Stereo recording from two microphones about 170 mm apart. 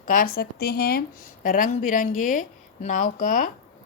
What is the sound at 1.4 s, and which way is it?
A woman's voice, 50° left (ahead or behind).